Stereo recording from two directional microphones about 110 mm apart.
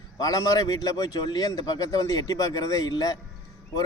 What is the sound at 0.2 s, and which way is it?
Speech, 35° left (ahead or behind).